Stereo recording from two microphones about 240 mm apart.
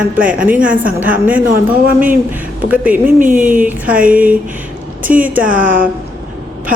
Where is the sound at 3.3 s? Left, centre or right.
Right.